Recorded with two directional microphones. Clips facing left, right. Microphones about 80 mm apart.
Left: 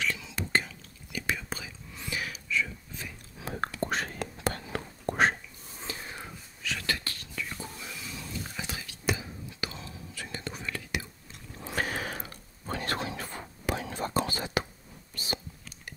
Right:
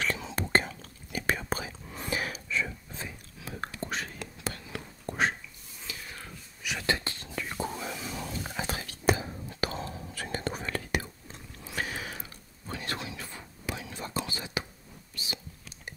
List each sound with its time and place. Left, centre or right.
0.0 s whispering: right
3.3 s whispering: left
5.0 s whispering: left
5.8 s a sound: left
6.6 s whispering: centre
7.5 s whispering: right
11.6 s a sound: left